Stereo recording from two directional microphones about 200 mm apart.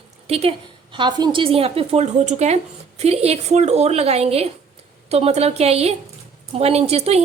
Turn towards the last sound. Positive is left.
turn(degrees=-30)  # may be behind; listen again after turning